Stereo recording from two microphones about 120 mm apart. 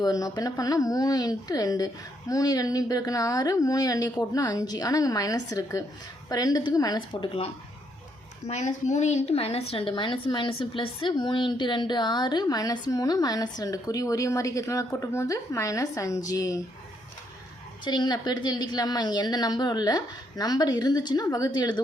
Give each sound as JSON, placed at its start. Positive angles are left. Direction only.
{"t": 0.0, "sound": "a woman's voice", "side_deg": 30}
{"t": 8.4, "sound": "a woman's voice", "side_deg": 75}
{"t": 17.8, "sound": "a woman's voice", "side_deg": 40}